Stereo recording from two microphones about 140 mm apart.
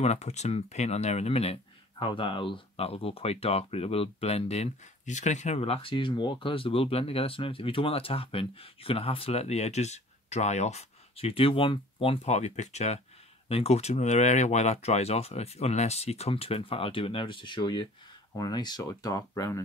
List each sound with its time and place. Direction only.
0.0 s speech: 50° left (ahead or behind); by 19.6 s 25° left (ahead or behind)